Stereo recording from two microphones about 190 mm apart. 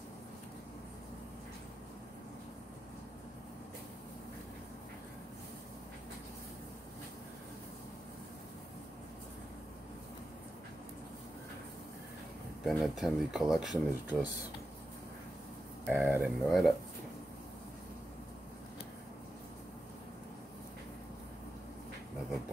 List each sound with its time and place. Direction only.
12.6 s speech: centre (ahead or behind)
15.9 s speech: 10° right (ahead or behind)